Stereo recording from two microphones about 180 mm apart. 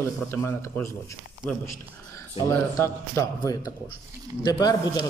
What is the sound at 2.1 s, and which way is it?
A man's voice, 15° left (ahead or behind).